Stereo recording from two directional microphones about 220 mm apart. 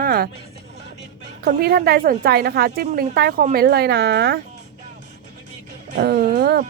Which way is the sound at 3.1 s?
45° right (ahead or behind).